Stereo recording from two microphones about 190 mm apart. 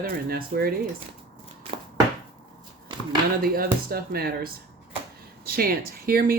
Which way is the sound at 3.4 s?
50° right (ahead or behind).